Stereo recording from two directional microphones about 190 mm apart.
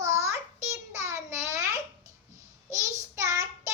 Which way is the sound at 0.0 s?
15° right (ahead or behind).